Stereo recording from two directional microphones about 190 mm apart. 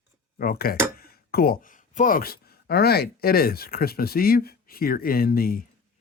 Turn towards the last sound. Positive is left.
turn(degrees=50)  # may be behind; listen again after turning